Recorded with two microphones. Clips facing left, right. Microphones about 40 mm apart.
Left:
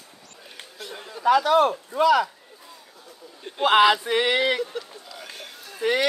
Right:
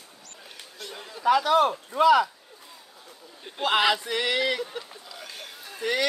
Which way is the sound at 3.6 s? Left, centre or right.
Centre.